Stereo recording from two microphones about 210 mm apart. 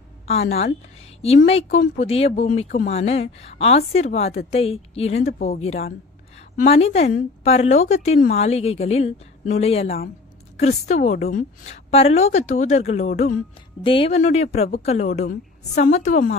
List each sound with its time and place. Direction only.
1.2 s a woman's voice: 30° left (ahead or behind)